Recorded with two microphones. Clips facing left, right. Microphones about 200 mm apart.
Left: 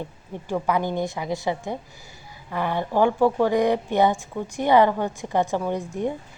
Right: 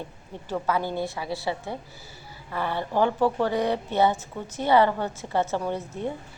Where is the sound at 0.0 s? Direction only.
15° left (ahead or behind).